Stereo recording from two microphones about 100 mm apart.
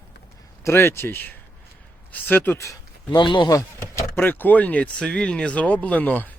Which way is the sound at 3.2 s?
50° left (ahead or behind).